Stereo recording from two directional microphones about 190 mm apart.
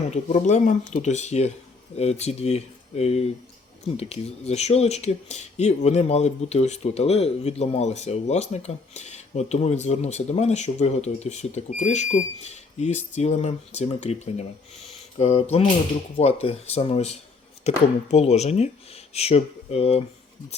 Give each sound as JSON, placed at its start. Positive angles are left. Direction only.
{"t": 0.1, "sound": "speech", "side_deg": 35}
{"t": 14.8, "sound": "mantra", "side_deg": 35}
{"t": 16.1, "sound": "speech", "side_deg": 30}